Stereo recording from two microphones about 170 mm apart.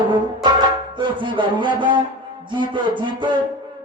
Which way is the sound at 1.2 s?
30° right (ahead or behind).